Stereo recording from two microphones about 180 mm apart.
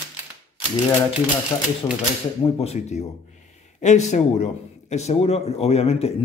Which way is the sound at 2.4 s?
35° left (ahead or behind).